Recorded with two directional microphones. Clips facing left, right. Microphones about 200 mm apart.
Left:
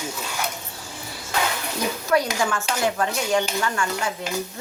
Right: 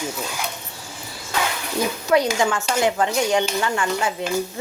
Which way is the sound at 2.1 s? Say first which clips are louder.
Right 4 dB; 20° right (ahead or behind).